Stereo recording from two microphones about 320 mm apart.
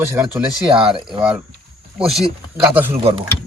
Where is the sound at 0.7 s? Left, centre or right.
Centre.